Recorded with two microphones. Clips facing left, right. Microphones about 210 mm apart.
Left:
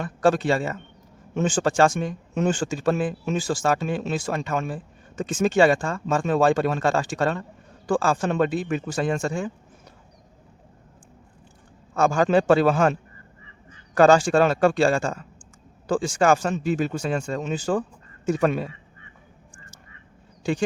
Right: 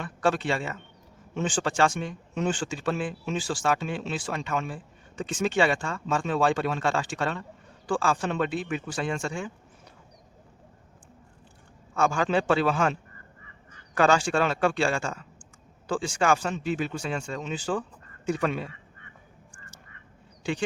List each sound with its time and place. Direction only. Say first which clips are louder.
0.0 s speech: left 6 dB; 40° left (ahead or behind)
11.9 s speech: left 5 dB; 40° left (ahead or behind)